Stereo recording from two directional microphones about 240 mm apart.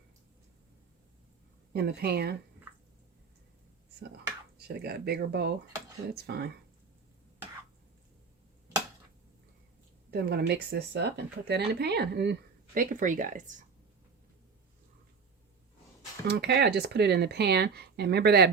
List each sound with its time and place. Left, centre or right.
1.7 s speech: right
4.7 s speech: right
10.1 s speech: right
16.2 s speech: right